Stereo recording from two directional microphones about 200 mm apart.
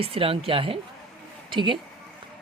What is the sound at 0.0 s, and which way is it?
Speech, 30° right (ahead or behind).